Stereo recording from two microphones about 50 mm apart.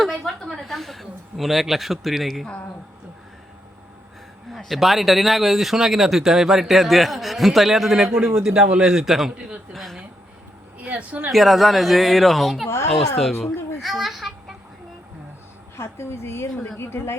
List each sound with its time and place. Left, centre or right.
0.4 s speech: centre
4.5 s speech: centre
9.0 s speech: centre
10.8 s a sound: right
11.3 s speech: centre
12.6 s a sound: left
12.9 s speech: centre
13.4 s a sound: centre
15.8 s speech: left